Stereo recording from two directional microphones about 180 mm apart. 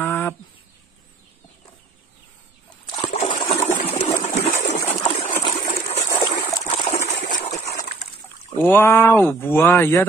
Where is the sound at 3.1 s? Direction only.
35° left (ahead or behind).